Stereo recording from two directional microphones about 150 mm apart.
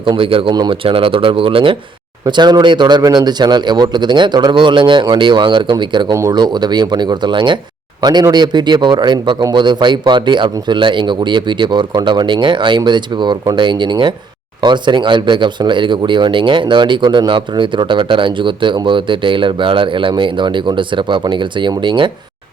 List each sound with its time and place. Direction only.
0.0 s speech: 35° right (ahead or behind)